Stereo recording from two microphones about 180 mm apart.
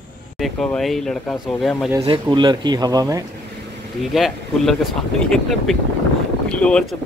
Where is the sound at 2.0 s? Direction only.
25° right (ahead or behind).